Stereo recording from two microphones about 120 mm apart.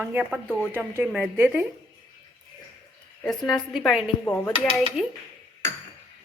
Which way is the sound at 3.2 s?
Centre (ahead or behind).